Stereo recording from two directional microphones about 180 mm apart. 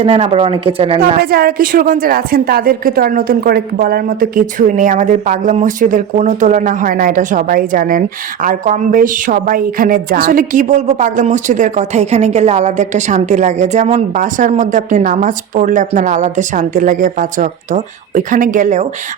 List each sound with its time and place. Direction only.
0.0 s speech: 35° right (ahead or behind)
1.2 s a woman's voice: 60° right (ahead or behind)